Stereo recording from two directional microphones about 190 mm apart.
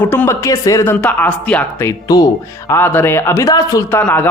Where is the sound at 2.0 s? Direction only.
20° left (ahead or behind).